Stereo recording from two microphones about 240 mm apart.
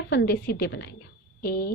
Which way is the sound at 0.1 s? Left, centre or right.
Left.